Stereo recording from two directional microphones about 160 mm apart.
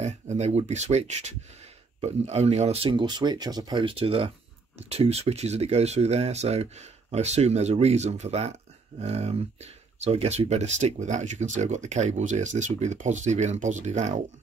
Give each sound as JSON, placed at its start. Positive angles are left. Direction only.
{"t": 0.0, "sound": "speech", "side_deg": -45}